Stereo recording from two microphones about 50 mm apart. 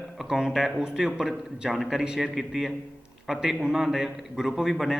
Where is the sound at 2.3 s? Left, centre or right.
Centre.